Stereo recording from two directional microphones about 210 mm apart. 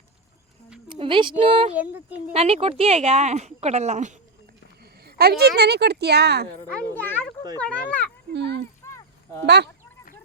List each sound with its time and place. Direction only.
0.9 s speech: 25° right (ahead or behind)
1.7 s speech: 5° right (ahead or behind)
2.3 s speech: 30° right (ahead or behind)
4.8 s a woman's voice: 50° right (ahead or behind)
6.7 s a child's voice: 5° left (ahead or behind)
8.3 s a sound: 55° right (ahead or behind)
8.8 s a sound: 15° left (ahead or behind)